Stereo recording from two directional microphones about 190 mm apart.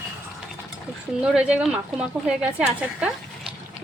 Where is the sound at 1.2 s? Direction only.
5° right (ahead or behind).